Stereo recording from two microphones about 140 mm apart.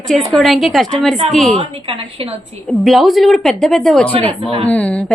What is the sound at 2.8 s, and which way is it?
A woman's voice, centre (ahead or behind).